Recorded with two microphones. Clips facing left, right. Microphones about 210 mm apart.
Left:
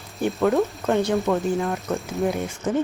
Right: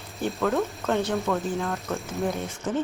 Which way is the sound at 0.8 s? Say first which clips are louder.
Left 3 dB; 15° left (ahead or behind).